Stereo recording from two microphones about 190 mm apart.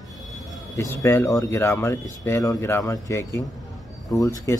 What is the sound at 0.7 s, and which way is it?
Speech, 15° left (ahead or behind).